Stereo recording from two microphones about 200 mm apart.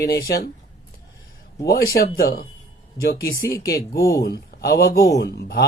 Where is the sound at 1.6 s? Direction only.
50° left (ahead or behind).